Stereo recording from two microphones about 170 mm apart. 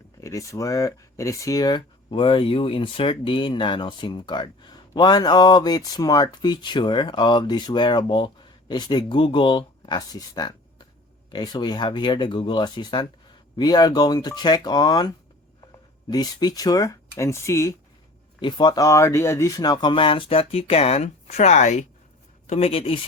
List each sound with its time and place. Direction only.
0.2 s speech: 20° left (ahead or behind); by 23.0 s 35° left (ahead or behind)